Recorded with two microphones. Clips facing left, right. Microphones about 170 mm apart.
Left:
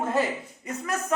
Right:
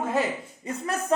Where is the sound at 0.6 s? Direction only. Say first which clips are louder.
Right 2 dB; 30° right (ahead or behind).